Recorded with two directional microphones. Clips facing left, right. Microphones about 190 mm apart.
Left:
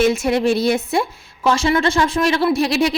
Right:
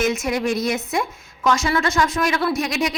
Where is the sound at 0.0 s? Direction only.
30° left (ahead or behind).